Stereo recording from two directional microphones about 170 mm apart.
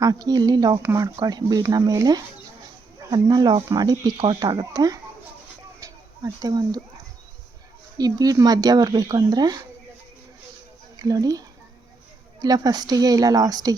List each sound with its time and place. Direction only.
0.0 s speech: 20° right (ahead or behind)
5.8 s a sound: 20° right (ahead or behind)
7.9 s speech: 20° right (ahead or behind)
11.0 s speech: 20° right (ahead or behind)